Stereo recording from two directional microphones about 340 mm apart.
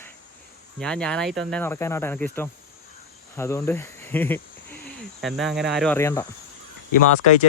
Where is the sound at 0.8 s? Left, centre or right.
Centre.